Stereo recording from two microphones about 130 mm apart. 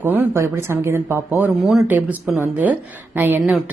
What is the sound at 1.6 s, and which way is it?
Speech, centre (ahead or behind).